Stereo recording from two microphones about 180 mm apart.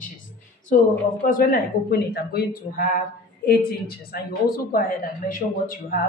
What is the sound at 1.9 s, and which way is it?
A woman's voice, 60° left (ahead or behind).